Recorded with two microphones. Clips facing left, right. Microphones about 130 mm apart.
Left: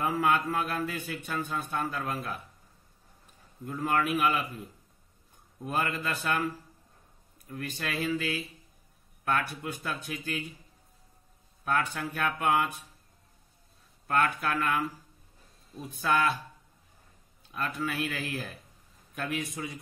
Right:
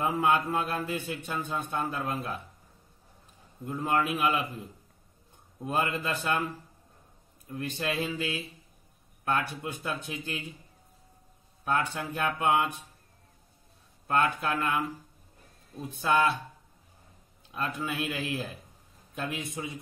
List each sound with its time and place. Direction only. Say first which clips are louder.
0.0 s a man's voice: right 1 dB; 25° right (ahead or behind)
3.6 s a man's voice: right 1 dB; 20° right (ahead or behind)
5.7 s a man's voice: right 2 dB; 20° right (ahead or behind)
7.5 s a man's voice: right 3 dB; 20° right (ahead or behind)
11.6 s a man's voice: even; 25° right (ahead or behind)
14.0 s a man's voice: right 1 dB; 25° right (ahead or behind)
16.0 s a man's voice: right 2 dB; 20° right (ahead or behind)
17.6 s a man's voice: even; 20° right (ahead or behind)